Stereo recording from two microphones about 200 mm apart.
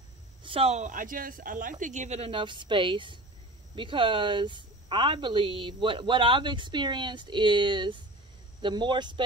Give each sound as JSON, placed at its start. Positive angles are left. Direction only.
{"t": 0.4, "sound": "a woman's voice", "side_deg": -25}